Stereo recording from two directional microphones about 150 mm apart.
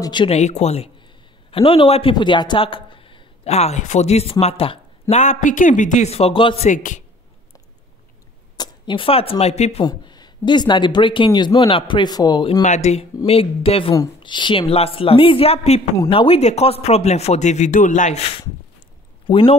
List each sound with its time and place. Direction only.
0.0 s speech: 30° left (ahead or behind)
0.3 s speech: 50° left (ahead or behind)
5.1 s speech: 50° left (ahead or behind)
6.7 s a man's voice: 60° left (ahead or behind)
8.5 s speech: 35° left (ahead or behind)
9.8 s speech: 30° left (ahead or behind)
12.6 s speech: 50° left (ahead or behind)